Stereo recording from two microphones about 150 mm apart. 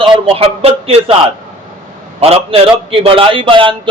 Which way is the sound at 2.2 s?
40° right (ahead or behind).